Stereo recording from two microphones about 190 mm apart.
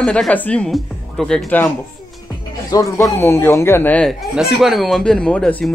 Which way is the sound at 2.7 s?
20° left (ahead or behind).